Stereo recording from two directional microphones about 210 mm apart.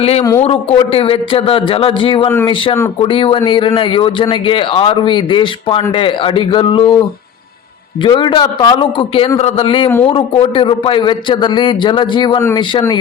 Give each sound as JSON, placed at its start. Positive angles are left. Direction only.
{"t": 0.0, "sound": "a man's voice", "side_deg": 30}
{"t": 8.0, "sound": "a man's voice", "side_deg": 25}